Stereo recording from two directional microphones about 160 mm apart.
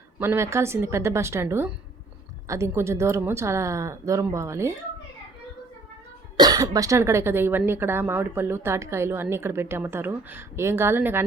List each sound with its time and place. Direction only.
0.2 s speech: 15° right (ahead or behind)
6.3 s speech: 25° right (ahead or behind)